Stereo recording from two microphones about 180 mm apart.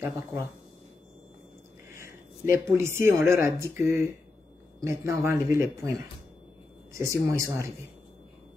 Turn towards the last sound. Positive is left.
turn(degrees=-15)  # may be behind; listen again after turning